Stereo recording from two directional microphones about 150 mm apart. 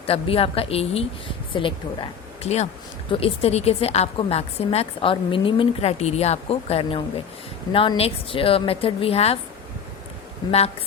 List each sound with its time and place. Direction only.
0.0 s a woman's voice: 40° left (ahead or behind)